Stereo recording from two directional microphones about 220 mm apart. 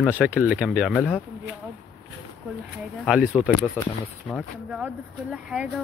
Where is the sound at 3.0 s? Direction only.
5° right (ahead or behind).